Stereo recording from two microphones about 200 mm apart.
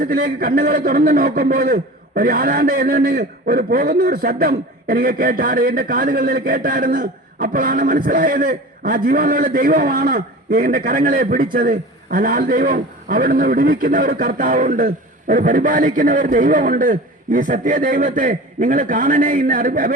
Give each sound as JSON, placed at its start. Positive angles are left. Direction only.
{"t": 0.0, "sound": "a man's voice", "side_deg": -45}